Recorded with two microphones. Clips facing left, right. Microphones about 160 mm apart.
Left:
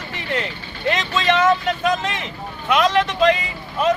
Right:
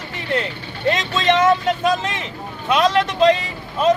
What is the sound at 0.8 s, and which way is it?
Speech, 30° right (ahead or behind).